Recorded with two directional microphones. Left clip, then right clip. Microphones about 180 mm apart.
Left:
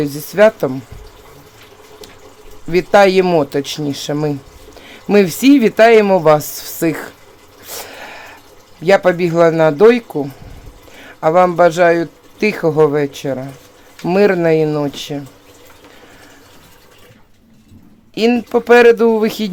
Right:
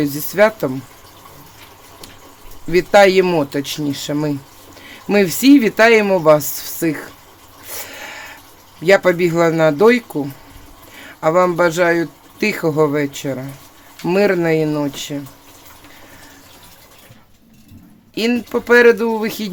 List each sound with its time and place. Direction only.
0.0 s speech: 10° left (ahead or behind)
2.7 s speech: 15° left (ahead or behind)
7.7 s dog: 20° left (ahead or behind)
8.8 s speech: 15° left (ahead or behind)
18.1 s speech: 20° left (ahead or behind)